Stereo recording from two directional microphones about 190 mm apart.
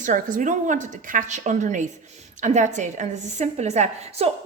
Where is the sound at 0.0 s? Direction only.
45° right (ahead or behind).